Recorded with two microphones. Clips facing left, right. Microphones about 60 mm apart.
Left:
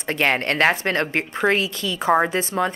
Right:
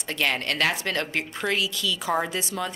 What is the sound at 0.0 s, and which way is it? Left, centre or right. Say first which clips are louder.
A woman's voice: left 6 dB; left.